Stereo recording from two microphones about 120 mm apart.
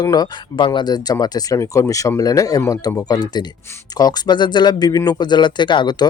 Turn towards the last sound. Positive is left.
turn(degrees=40)  # may be behind; listen again after turning